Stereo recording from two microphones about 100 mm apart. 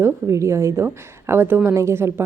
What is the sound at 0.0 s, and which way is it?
A woman's voice, 30° right (ahead or behind).